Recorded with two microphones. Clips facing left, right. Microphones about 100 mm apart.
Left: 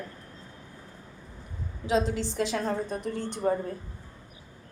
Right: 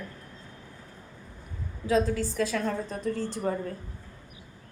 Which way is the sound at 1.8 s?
20° left (ahead or behind).